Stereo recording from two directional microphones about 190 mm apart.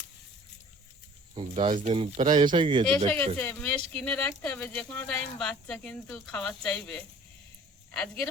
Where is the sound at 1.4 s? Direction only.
30° right (ahead or behind).